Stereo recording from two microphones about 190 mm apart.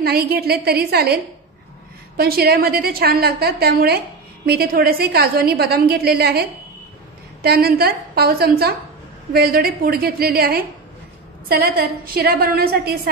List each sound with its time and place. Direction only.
0.0 s a woman's voice: 55° right (ahead or behind)
7.4 s a woman's voice: 55° right (ahead or behind)